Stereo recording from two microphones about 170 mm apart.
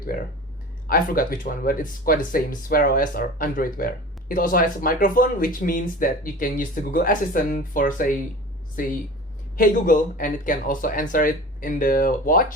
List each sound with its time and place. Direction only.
0.9 s speech: 55° left (ahead or behind)
9.6 s speech: 55° left (ahead or behind)